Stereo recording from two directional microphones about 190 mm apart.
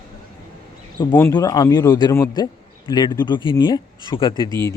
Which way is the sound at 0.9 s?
20° left (ahead or behind).